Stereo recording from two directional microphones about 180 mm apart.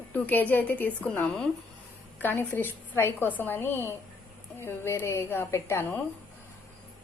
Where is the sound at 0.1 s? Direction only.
10° left (ahead or behind).